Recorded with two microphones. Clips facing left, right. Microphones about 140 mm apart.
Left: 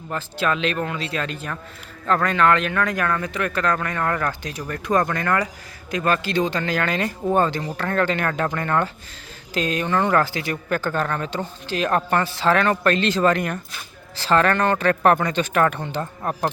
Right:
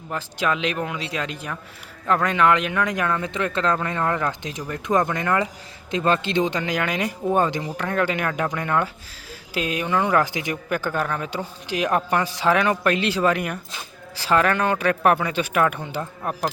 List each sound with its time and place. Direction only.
0.1 s speech: 15° right (ahead or behind)